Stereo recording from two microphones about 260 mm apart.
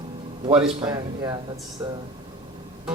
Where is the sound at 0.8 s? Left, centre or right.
Centre.